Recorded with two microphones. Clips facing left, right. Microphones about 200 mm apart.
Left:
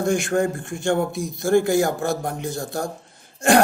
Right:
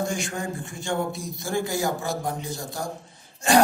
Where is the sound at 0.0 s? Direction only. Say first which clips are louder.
Left 8 dB; 60° left (ahead or behind).